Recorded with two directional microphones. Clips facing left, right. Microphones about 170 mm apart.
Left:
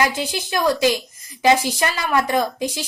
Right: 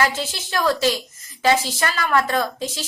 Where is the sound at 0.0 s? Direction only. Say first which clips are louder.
Left 1 dB; 15° left (ahead or behind).